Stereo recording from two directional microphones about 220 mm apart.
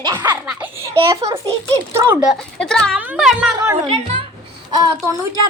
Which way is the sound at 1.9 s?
10° right (ahead or behind).